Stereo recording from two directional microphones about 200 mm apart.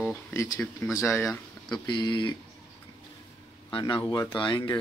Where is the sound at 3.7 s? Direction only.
25° left (ahead or behind).